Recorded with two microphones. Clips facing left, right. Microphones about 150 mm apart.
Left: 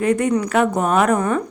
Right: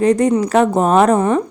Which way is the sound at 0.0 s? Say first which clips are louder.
Right 4 dB; 35° right (ahead or behind).